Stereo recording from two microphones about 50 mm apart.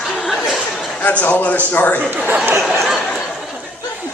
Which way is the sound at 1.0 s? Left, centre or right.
Left.